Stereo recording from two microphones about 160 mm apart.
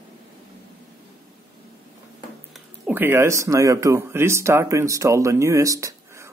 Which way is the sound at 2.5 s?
10° right (ahead or behind).